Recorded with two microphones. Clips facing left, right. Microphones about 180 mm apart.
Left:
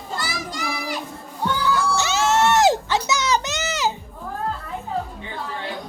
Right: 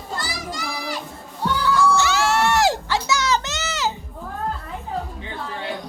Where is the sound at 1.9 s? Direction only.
20° left (ahead or behind).